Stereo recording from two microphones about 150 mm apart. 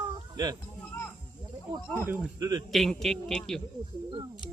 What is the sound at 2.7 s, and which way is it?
Speech, centre (ahead or behind).